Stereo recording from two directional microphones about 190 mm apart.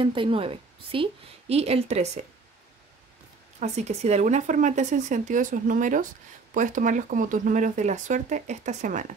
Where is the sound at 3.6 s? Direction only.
35° right (ahead or behind).